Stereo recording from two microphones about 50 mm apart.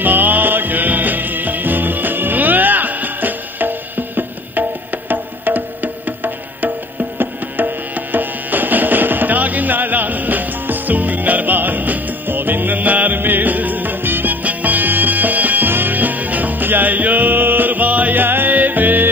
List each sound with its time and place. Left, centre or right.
0.0 s music: right